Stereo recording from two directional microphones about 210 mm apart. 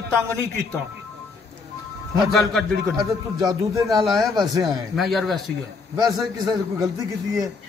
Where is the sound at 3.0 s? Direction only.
20° right (ahead or behind).